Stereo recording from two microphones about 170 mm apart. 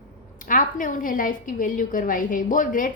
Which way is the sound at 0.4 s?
50° left (ahead or behind).